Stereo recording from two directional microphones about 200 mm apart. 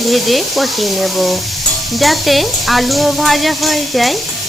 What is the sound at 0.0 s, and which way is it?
Stir, centre (ahead or behind).